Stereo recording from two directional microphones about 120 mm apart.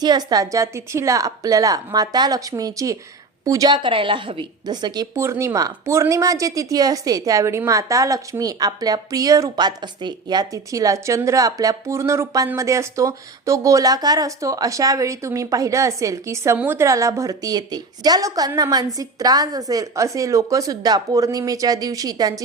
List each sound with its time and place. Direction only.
0.0 s a woman's voice: 35° right (ahead or behind)
5.1 s a woman's voice: 25° right (ahead or behind)